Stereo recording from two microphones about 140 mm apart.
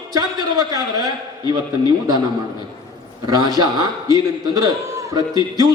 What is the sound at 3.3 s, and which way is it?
Speech, 30° right (ahead or behind).